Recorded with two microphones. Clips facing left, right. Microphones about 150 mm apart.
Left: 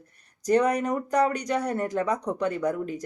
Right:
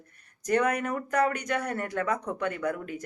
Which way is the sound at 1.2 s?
35° left (ahead or behind).